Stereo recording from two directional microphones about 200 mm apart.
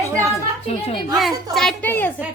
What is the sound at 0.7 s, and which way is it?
Speech, 30° left (ahead or behind).